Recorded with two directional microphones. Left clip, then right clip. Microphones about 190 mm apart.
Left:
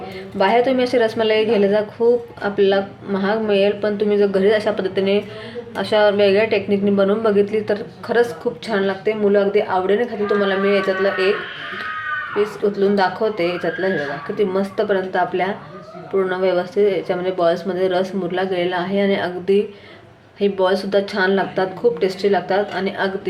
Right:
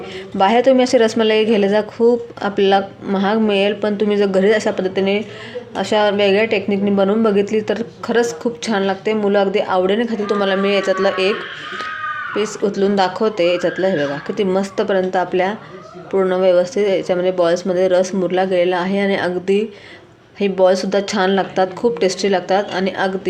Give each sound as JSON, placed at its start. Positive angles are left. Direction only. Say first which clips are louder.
{"t": 0.3, "sound": "a woman's voice", "louder": "right 3 dB", "side_deg": -45}
{"t": 12.4, "sound": "a woman's voice", "louder": "even", "side_deg": -50}